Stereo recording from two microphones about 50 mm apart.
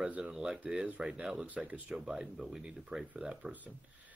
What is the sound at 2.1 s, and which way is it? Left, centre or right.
Speech, centre.